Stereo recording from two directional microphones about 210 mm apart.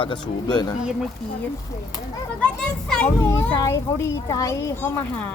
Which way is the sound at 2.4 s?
5° left (ahead or behind).